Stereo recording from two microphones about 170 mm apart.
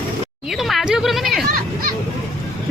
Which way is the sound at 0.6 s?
Centre (ahead or behind).